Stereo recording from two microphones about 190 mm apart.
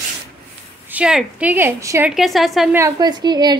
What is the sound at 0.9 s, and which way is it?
A woman's voice, 5° right (ahead or behind).